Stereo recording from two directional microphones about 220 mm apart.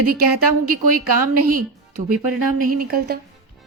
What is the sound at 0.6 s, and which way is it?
Speech, 40° right (ahead or behind).